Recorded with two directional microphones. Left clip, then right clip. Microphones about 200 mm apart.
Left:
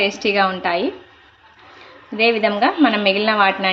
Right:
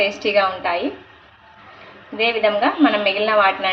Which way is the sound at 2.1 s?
45° left (ahead or behind).